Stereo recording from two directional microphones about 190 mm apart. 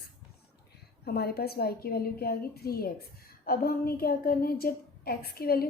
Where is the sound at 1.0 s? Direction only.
55° left (ahead or behind).